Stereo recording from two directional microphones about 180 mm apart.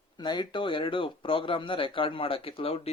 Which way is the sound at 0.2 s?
25° left (ahead or behind).